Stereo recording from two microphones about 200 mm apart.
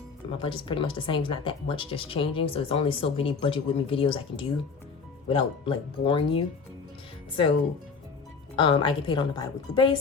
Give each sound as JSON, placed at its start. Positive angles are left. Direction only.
{"t": 0.3, "sound": "speech", "side_deg": 25}
{"t": 8.5, "sound": "speech", "side_deg": 25}